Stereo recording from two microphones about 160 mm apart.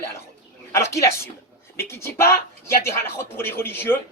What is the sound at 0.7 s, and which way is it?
A man's voice, 15° left (ahead or behind).